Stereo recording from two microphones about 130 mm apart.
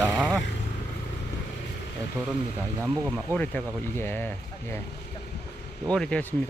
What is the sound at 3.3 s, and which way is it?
Speech, 15° left (ahead or behind).